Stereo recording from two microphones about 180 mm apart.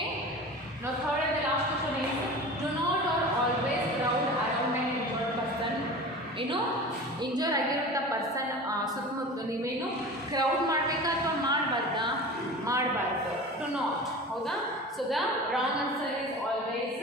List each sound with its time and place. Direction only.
7.3 s a woman's voice: 20° right (ahead or behind)
10.3 s a woman's voice: 20° right (ahead or behind)